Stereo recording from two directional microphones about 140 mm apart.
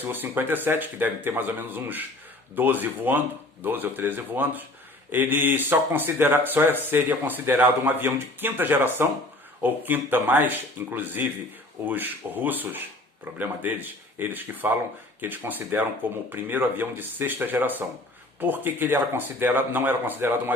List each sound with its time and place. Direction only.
0.1 s speech: 15° right (ahead or behind)